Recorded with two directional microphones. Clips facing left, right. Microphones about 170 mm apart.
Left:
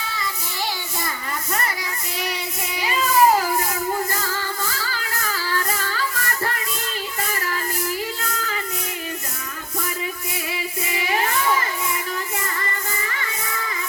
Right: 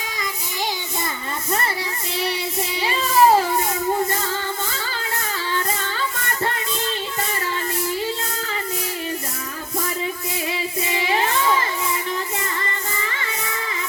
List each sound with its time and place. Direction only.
2.1 s child singing: 30° right (ahead or behind)
10.5 s child singing: 25° right (ahead or behind)